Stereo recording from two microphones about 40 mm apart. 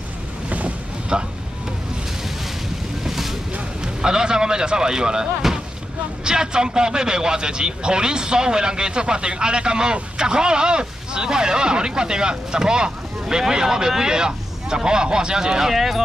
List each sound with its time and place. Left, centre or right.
0.5 s boat: right
1.1 s speech: right
3.0 s boat: centre
3.8 s speech: centre